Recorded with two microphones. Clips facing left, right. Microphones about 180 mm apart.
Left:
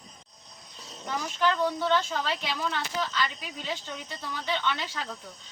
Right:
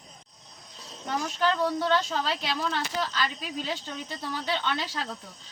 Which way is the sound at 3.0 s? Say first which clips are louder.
Right 1 dB; 40° right (ahead or behind).